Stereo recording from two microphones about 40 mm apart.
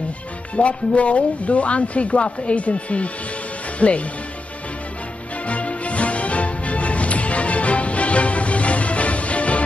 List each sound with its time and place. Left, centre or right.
0.6 s speech: left
5.5 s music: left